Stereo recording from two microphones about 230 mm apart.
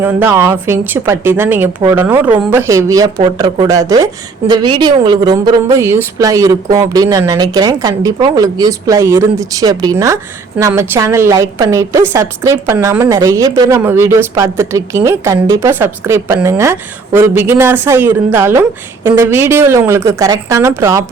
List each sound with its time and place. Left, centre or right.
0.0 s a woman's voice: centre